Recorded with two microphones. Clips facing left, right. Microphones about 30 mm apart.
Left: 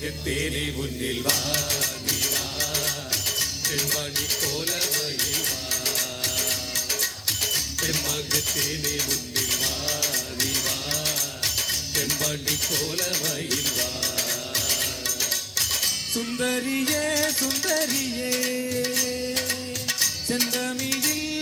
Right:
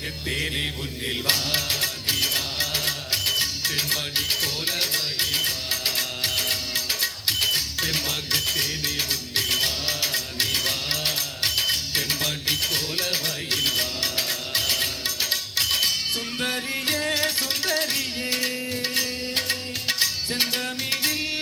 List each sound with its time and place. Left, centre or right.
0.3 s music: right